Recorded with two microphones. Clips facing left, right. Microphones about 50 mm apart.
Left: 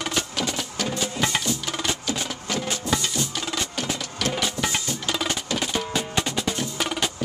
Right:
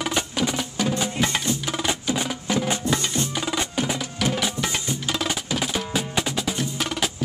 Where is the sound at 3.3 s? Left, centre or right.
Centre.